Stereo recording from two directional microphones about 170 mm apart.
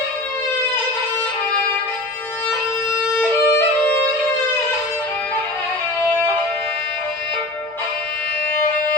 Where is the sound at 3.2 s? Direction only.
10° left (ahead or behind).